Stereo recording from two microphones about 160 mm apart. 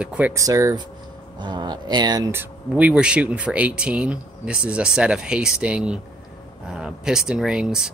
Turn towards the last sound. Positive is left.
turn(degrees=-5)  # may be behind; listen again after turning